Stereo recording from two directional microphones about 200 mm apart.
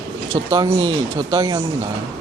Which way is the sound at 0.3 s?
15° right (ahead or behind).